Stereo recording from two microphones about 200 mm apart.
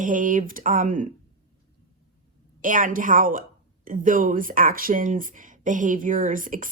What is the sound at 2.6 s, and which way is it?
A woman's voice, 40° right (ahead or behind).